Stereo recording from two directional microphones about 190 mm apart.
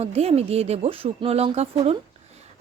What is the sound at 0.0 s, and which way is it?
Speech, 35° right (ahead or behind).